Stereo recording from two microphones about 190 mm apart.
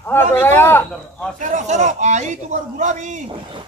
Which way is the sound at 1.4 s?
40° right (ahead or behind).